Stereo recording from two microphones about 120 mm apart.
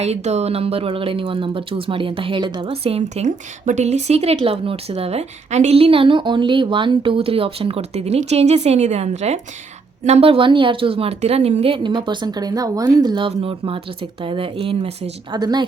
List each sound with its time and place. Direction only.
0.0 s a woman's voice: 65° right (ahead or behind)
3.0 s a woman's voice: 85° right; by 15.1 s 55° right (ahead or behind)
15.3 s a woman's voice: 35° right (ahead or behind)